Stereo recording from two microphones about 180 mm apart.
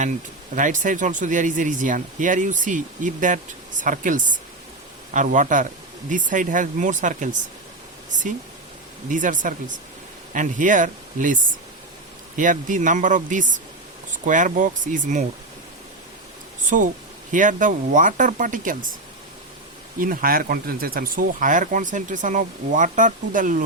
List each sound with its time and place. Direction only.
0.5 s speech: 45° right (ahead or behind)
12.4 s speech: 45° right (ahead or behind)
16.6 s speech: 45° right (ahead or behind)
20.0 s speech: 55° right (ahead or behind)